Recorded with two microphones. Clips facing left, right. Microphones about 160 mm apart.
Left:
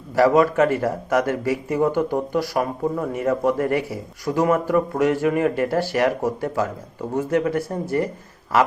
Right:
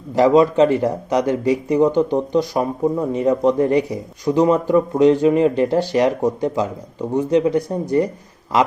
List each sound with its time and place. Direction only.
0.1 s a man's voice: 20° right (ahead or behind)